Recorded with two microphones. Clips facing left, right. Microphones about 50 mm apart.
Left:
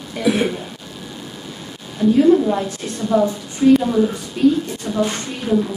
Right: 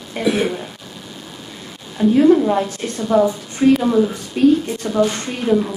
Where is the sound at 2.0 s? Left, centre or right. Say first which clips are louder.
Right 1 dB; right.